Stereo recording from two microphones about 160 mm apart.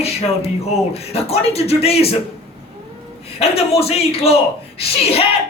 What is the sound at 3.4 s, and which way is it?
Speech, 40° left (ahead or behind).